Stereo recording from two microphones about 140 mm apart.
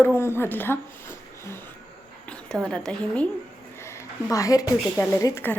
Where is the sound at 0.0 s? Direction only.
15° left (ahead or behind).